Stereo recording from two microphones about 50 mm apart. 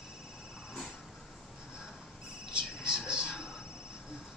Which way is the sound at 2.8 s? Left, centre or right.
Centre.